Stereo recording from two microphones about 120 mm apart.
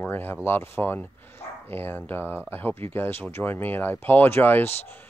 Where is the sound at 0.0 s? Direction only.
15° left (ahead or behind).